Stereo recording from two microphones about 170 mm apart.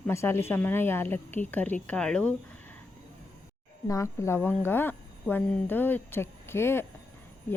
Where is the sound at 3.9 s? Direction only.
15° left (ahead or behind).